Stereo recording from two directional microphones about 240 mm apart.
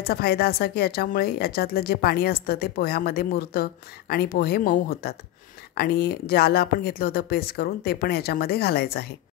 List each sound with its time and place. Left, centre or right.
0.0 s a woman's voice: left